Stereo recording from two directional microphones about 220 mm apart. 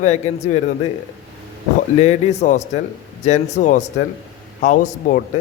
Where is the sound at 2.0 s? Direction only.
30° left (ahead or behind).